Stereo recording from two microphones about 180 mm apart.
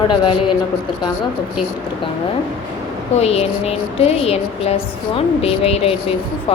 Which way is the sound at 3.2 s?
35° left (ahead or behind).